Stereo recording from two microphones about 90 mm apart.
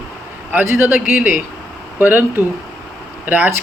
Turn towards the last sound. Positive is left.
turn(degrees=-20)  # may be behind; listen again after turning